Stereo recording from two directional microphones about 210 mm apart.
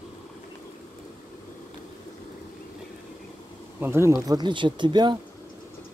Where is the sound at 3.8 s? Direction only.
10° right (ahead or behind).